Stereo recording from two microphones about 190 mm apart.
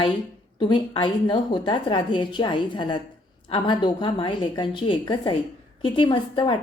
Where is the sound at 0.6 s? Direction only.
25° left (ahead or behind).